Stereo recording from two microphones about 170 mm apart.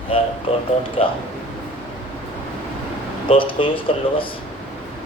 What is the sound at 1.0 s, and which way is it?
Speech, 35° left (ahead or behind).